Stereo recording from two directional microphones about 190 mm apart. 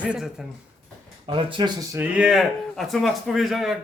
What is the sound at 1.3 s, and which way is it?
Speech, 25° right (ahead or behind).